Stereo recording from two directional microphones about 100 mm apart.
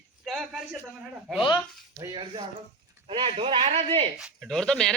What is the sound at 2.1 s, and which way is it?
Speech, 45° right (ahead or behind).